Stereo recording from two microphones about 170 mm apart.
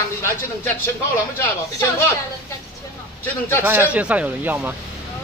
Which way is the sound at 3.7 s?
10° right (ahead or behind).